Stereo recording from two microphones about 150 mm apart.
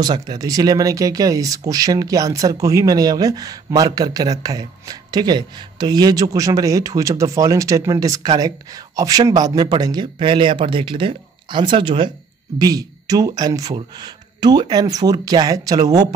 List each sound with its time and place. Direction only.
0.0 s speech: 30° right (ahead or behind)